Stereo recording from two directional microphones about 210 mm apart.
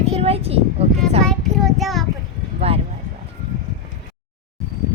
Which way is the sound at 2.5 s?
30° right (ahead or behind).